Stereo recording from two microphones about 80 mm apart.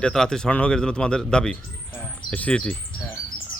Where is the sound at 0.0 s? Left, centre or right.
Centre.